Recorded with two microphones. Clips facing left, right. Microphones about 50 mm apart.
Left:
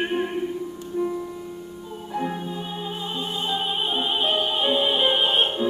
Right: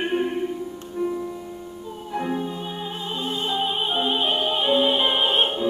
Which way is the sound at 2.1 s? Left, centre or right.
Centre.